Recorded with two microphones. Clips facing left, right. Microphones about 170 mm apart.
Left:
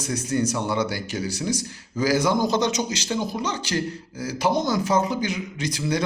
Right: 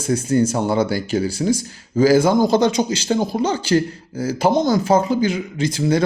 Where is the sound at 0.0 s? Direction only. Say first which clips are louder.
Right 7 dB; 30° right (ahead or behind).